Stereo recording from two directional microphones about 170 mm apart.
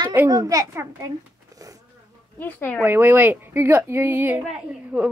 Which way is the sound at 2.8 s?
10° right (ahead or behind).